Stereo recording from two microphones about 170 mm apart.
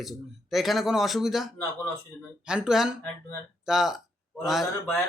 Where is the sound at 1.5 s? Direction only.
10° left (ahead or behind).